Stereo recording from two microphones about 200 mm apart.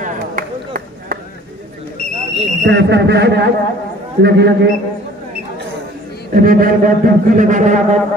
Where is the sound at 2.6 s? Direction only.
60° right (ahead or behind).